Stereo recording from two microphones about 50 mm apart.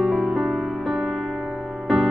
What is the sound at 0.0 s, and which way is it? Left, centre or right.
Music, centre.